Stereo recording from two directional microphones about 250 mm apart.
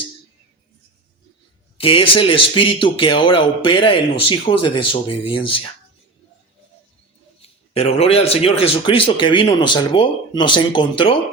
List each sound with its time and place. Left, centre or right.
1.8 s a man's voice: left
7.4 s a man's voice: left